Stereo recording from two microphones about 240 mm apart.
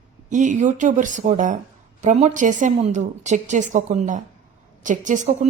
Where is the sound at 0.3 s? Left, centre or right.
Right.